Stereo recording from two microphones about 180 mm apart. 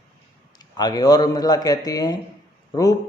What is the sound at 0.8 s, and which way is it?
Speech, 20° left (ahead or behind).